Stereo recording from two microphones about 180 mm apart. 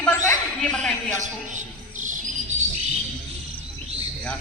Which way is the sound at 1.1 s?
45° right (ahead or behind).